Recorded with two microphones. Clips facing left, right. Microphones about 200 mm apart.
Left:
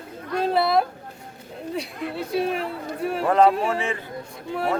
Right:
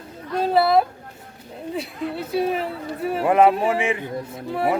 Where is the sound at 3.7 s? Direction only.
15° right (ahead or behind).